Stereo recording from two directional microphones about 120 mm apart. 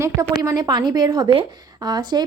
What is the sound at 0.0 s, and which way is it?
A woman's voice, 25° right (ahead or behind).